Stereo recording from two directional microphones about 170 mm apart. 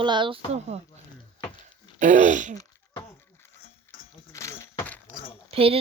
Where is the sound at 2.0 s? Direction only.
50° right (ahead or behind).